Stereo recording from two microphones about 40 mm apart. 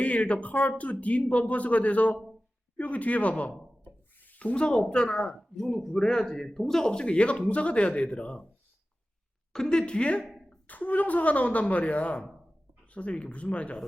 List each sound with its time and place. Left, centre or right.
0.0 s a woman's voice: left
3.8 s a sound: left
4.4 s speech: left; by 7.0 s centre
7.0 s a woman's voice: left
9.5 s speech: centre
9.8 s speech: left
10.7 s a woman's voice: left